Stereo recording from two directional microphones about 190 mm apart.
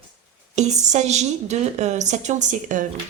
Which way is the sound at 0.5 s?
35° right (ahead or behind).